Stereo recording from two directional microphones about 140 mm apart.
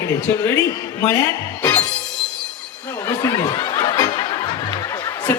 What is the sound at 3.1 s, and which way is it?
Snicker, 25° left (ahead or behind).